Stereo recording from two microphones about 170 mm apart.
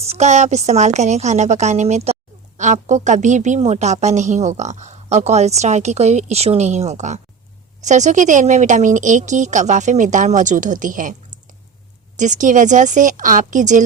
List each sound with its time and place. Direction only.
0.0 s a woman's voice: 40° right (ahead or behind)
12.1 s a woman's voice: 45° right (ahead or behind)